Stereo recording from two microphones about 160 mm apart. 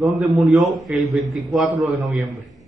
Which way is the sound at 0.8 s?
Centre (ahead or behind).